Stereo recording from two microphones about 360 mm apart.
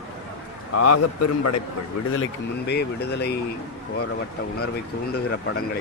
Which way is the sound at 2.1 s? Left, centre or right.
Left.